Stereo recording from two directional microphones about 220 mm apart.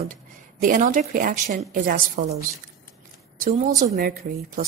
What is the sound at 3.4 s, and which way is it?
Speech, 35° right (ahead or behind).